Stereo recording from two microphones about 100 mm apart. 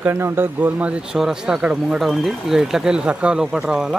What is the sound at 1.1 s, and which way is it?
A man's voice, 5° right (ahead or behind).